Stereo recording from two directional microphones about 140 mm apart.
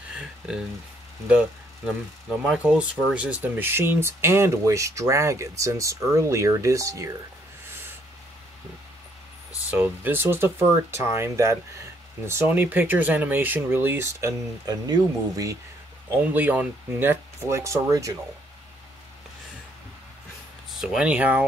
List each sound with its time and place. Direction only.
0.1 s a sound: 5° right (ahead or behind)
2.5 s speech: 5° right (ahead or behind); by 7.2 s 25° right (ahead or behind)
9.7 s speech: 15° right (ahead or behind)
16.1 s speech: 10° right (ahead or behind)
20.7 s speech: 5° right (ahead or behind)